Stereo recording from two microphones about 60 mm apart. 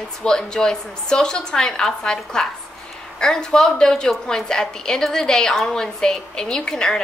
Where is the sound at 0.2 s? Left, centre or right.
Centre.